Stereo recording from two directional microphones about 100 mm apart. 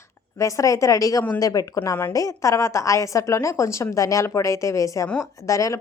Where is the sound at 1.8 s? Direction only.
25° left (ahead or behind).